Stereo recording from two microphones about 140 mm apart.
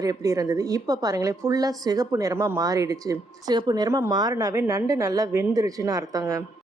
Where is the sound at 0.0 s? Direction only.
25° right (ahead or behind).